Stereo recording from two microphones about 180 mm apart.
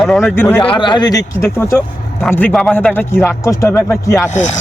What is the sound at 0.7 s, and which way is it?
Speech, 25° left (ahead or behind).